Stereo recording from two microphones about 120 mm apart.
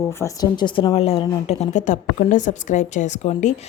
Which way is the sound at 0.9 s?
55° left (ahead or behind).